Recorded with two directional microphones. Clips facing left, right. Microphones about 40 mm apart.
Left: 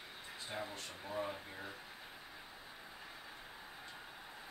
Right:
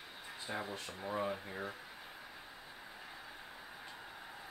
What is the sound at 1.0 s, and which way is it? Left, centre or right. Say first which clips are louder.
Speech: right 4 dB; right.